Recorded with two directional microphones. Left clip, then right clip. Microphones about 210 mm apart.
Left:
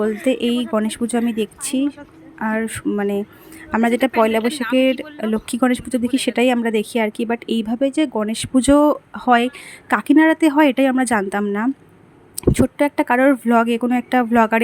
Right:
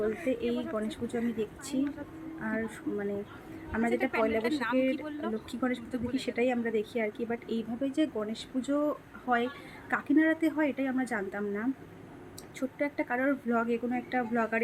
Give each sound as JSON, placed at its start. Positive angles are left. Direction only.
{"t": 0.3, "sound": "speech", "side_deg": 50}